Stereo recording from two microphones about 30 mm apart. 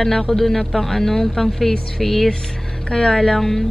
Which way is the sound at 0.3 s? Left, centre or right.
Centre.